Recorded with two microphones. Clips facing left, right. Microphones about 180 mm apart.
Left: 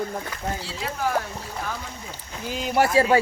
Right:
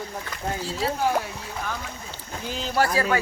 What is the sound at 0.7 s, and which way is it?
Speech, 40° right (ahead or behind).